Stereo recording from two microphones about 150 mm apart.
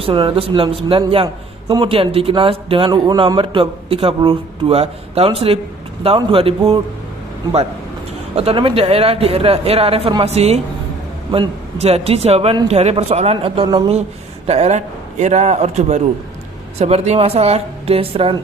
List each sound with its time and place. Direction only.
0.0 s a man's voice: 35° right (ahead or behind)
8.4 s a man's voice: 35° right (ahead or behind)